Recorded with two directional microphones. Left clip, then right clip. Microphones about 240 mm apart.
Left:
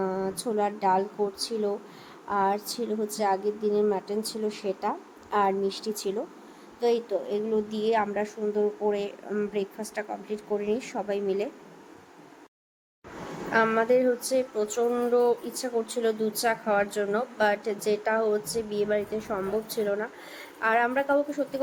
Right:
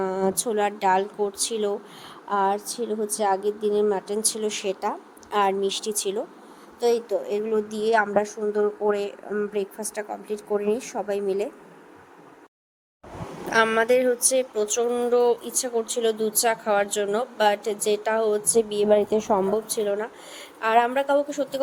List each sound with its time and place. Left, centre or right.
0.0 s a woman's voice: right
13.5 s speech: right